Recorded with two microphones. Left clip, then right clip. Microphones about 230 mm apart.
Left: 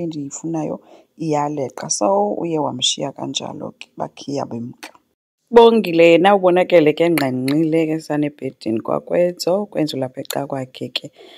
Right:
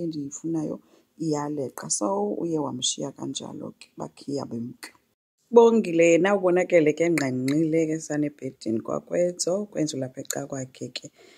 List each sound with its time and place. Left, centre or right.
0.0 s speech: left